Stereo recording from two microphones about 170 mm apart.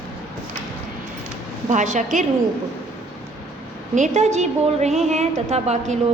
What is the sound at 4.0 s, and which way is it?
A woman's voice, 40° right (ahead or behind).